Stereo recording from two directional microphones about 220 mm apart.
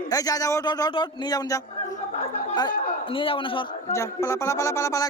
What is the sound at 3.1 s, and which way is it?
Speech, 25° left (ahead or behind).